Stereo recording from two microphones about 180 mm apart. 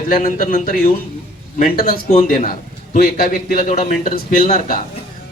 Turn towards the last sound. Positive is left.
turn(degrees=35)  # may be behind; listen again after turning